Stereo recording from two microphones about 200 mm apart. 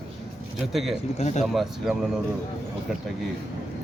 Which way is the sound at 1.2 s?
35° left (ahead or behind).